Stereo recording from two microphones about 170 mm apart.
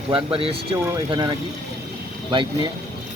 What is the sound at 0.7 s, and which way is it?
Speech, 15° right (ahead or behind).